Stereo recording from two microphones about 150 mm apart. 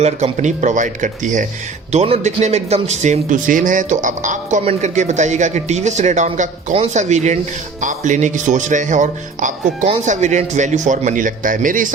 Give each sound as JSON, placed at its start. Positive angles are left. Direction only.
{"t": 0.0, "sound": "a man's voice", "side_deg": -50}